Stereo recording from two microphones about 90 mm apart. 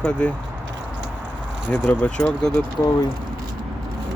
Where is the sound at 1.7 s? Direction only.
20° left (ahead or behind).